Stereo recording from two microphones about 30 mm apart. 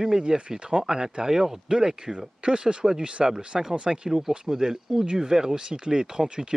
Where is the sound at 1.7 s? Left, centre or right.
Right.